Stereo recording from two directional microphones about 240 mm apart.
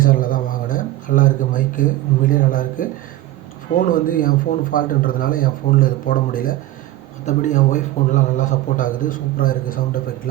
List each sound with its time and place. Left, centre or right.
0.0 s speech: left
3.9 s a man's voice: left